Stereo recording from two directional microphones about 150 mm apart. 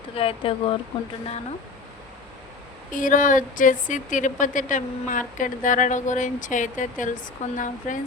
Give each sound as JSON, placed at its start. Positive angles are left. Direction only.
{"t": 0.1, "sound": "speech", "side_deg": 40}
{"t": 2.9, "sound": "speech", "side_deg": 60}